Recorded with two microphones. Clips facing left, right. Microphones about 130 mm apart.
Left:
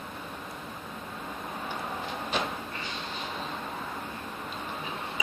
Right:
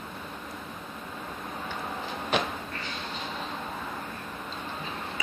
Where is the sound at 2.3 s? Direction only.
65° right (ahead or behind).